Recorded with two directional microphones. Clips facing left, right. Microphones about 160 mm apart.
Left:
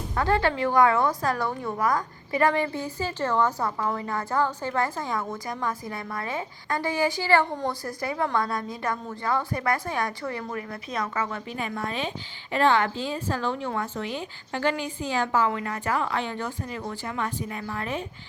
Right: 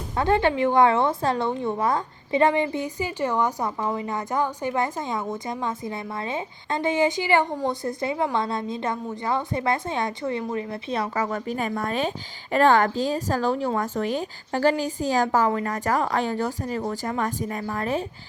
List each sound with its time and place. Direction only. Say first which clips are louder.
0.2 s a woman's voice: right 3 dB; 20° right (ahead or behind); by 18.0 s 40° right (ahead or behind)